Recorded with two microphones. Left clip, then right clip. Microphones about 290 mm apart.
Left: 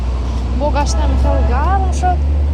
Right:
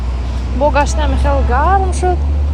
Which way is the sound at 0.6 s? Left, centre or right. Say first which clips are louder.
Right 5 dB; centre.